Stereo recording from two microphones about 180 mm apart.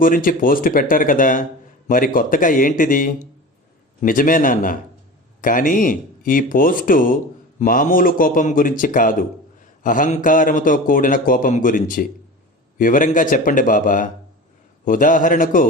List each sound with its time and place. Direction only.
0.0 s a man's voice: 50° left (ahead or behind)